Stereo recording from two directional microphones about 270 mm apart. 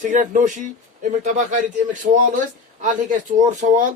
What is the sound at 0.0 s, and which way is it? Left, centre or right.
A child's voice, right.